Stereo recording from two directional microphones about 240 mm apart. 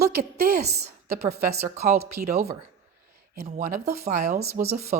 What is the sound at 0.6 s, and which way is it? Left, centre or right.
Speech, right.